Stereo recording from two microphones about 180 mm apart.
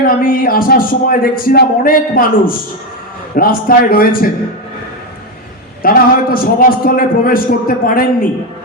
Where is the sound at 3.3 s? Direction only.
55° left (ahead or behind).